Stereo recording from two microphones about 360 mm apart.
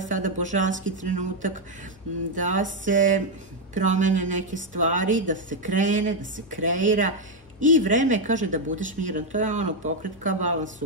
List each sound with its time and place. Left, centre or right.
0.0 s speech: right
2.3 s a woman's voice: right